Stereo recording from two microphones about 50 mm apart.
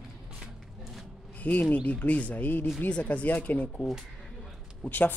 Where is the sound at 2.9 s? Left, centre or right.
Left.